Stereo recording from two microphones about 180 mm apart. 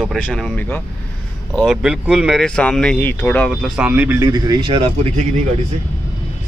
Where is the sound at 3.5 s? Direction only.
5° right (ahead or behind).